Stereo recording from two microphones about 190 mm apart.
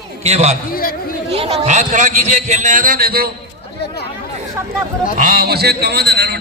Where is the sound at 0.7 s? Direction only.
50° left (ahead or behind).